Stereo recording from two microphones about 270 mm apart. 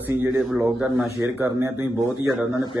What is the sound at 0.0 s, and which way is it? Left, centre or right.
Speech, centre.